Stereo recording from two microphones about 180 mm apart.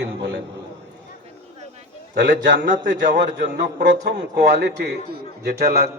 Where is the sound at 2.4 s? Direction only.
75° right (ahead or behind); by 5.8 s 60° right (ahead or behind).